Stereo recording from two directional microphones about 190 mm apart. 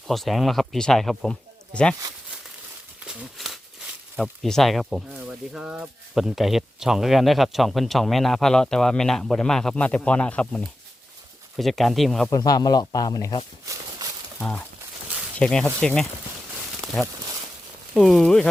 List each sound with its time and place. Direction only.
0.1 s speech: centre (ahead or behind)
3.0 s a sound: centre (ahead or behind)
4.2 s speech: 5° left (ahead or behind)
12.3 s speech: 20° left (ahead or behind)
14.3 s speech: 5° left (ahead or behind)